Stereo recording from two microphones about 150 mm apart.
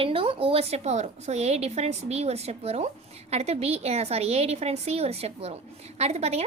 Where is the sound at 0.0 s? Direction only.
35° right (ahead or behind).